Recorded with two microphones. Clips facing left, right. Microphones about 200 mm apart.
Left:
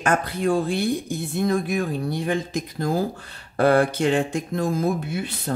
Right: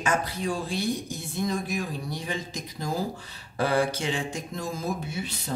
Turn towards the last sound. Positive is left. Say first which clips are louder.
# left 7 dB
turn(degrees=55)  # may be behind; listen again after turning